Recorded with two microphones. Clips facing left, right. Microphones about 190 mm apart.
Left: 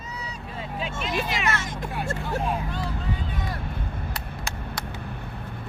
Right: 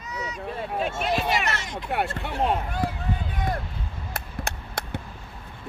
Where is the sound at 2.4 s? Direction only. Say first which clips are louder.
Right 4 dB; 60° right (ahead or behind).